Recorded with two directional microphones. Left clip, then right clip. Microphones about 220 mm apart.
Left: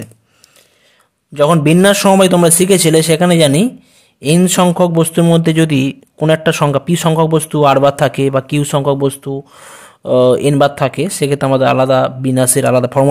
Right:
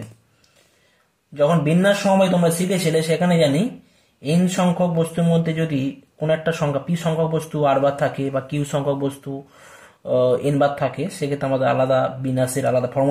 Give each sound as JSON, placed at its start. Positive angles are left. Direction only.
{"t": 1.3, "sound": "speech", "side_deg": 50}